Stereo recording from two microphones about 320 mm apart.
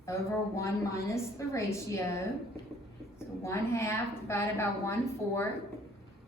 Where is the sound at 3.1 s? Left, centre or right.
Centre.